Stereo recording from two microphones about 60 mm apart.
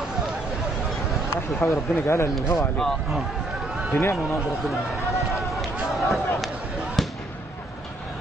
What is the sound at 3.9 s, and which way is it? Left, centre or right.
Speech, left.